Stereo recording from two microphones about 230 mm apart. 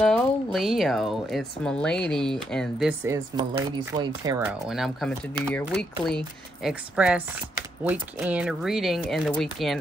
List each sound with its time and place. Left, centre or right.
0.0 s speech: centre
4.6 s speech: centre